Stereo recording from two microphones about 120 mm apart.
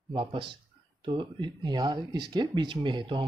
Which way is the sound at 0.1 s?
45° right (ahead or behind).